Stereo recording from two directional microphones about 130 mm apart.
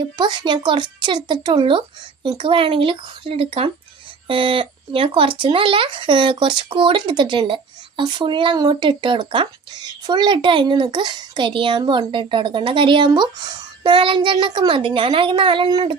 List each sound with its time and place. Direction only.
0.2 s speech: 35° right (ahead or behind)